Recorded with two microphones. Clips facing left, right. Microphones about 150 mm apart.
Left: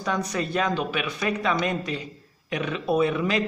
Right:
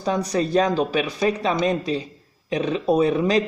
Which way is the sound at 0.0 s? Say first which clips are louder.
Right 5 dB; 35° right (ahead or behind).